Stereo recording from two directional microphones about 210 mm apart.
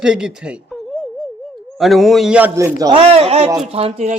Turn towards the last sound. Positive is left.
turn(degrees=-30)  # may be behind; listen again after turning